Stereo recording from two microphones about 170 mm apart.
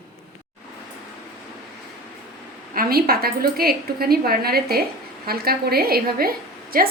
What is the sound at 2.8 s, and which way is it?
A woman's voice, 60° right (ahead or behind).